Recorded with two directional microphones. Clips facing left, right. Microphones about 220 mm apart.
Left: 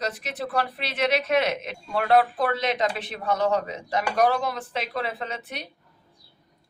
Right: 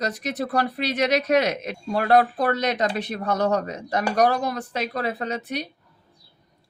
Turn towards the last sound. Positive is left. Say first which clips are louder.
# right 5 dB
turn(degrees=-40)  # may be behind; listen again after turning